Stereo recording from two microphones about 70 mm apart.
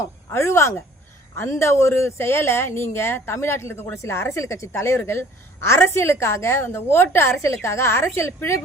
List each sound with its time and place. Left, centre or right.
0.0 s speech: left